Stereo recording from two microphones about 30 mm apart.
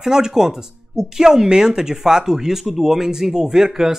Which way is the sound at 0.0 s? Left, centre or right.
Centre.